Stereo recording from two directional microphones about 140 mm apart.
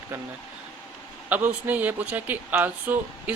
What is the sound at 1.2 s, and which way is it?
Speech, 10° right (ahead or behind).